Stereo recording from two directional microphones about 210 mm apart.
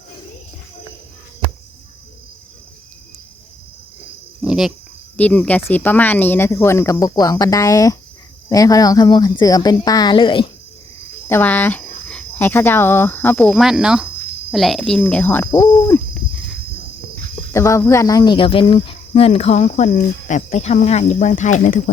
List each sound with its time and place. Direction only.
4.4 s goat: centre (ahead or behind)
5.1 s speech: 10° left (ahead or behind); by 10.5 s 25° left (ahead or behind)
11.3 s speech: 10° left (ahead or behind)
17.5 s speech: 15° left (ahead or behind); by 21.8 s 35° left (ahead or behind)